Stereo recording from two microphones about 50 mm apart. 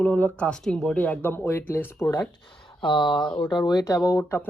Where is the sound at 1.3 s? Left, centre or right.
Left.